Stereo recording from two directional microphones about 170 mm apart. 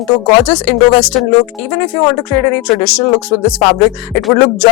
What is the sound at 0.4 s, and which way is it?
Speech, 10° left (ahead or behind).